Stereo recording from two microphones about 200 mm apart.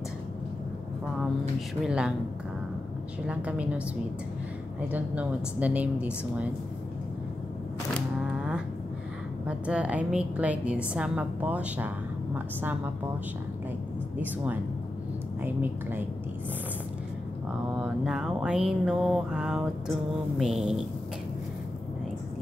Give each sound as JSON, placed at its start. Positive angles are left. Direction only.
{"t": 1.9, "sound": "mantra", "side_deg": -5}
{"t": 3.3, "sound": "a woman's voice", "side_deg": -5}
{"t": 4.9, "sound": "a woman's voice", "side_deg": -5}
{"t": 8.2, "sound": "a sound", "side_deg": -5}
{"t": 9.5, "sound": "a woman's voice", "side_deg": -5}
{"t": 14.1, "sound": "a woman's voice", "side_deg": -10}
{"t": 17.7, "sound": "mantra", "side_deg": -5}